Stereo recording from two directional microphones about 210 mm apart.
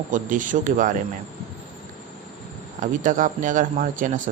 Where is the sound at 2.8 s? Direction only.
40° right (ahead or behind).